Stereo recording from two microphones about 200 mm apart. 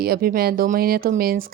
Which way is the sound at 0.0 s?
50° right (ahead or behind).